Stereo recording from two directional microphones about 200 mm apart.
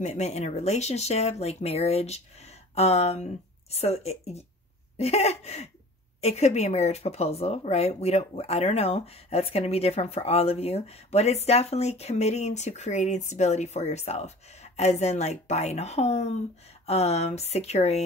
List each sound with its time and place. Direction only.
0.0 s speech: 35° left (ahead or behind)